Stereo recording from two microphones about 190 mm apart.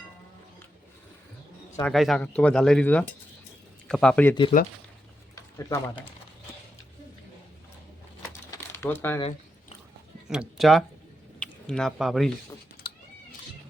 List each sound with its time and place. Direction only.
1.8 s speech: centre (ahead or behind); by 6.1 s 15° left (ahead or behind)
8.3 s crumpling: 15° left (ahead or behind)
10.2 s speech: 5° right (ahead or behind)